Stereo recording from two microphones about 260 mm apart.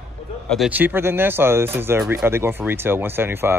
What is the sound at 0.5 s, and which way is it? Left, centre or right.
A man's voice, centre.